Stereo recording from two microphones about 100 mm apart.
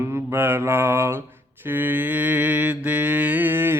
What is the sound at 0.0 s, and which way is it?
Mantra, 25° right (ahead or behind).